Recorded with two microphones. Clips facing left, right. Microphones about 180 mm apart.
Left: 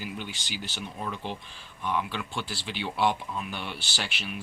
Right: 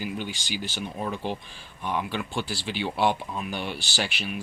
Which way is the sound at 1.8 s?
40° right (ahead or behind).